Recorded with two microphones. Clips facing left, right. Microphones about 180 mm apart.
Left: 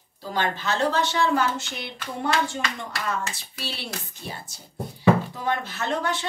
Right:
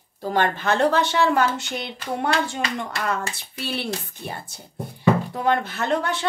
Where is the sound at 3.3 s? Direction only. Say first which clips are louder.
Right 6 dB; 60° right (ahead or behind).